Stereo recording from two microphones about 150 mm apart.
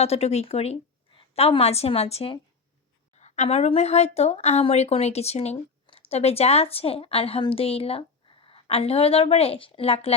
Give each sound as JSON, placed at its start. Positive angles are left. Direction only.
{"t": 0.0, "sound": "a woman's voice", "side_deg": 45}